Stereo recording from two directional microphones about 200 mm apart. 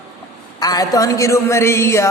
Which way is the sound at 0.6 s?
20° left (ahead or behind).